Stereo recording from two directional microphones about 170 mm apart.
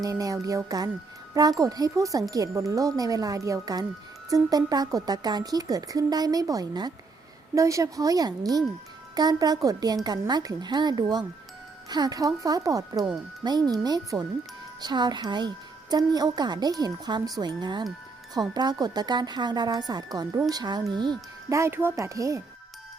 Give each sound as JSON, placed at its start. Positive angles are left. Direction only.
{"t": 0.0, "sound": "speech", "side_deg": -20}